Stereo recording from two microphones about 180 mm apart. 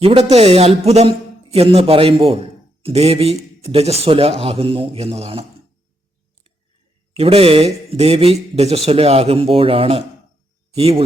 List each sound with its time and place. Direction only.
0.0 s a man's voice: 35° right (ahead or behind)
7.2 s a man's voice: 35° right (ahead or behind)